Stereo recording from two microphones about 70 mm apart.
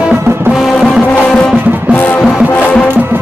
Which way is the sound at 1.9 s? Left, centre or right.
Left.